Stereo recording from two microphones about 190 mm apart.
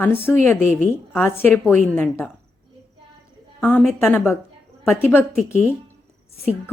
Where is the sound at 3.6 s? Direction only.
5° left (ahead or behind).